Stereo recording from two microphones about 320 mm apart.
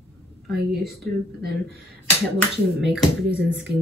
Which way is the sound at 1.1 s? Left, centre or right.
Right.